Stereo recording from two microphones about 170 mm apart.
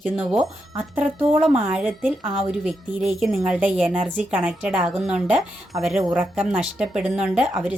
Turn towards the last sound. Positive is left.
turn(degrees=-5)  # may be behind; listen again after turning